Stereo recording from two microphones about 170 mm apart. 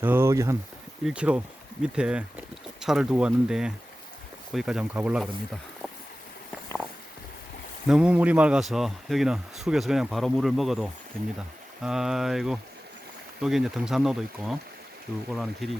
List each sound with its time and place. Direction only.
0.0 s speech: 10° right (ahead or behind)
7.9 s speech: 5° right (ahead or behind)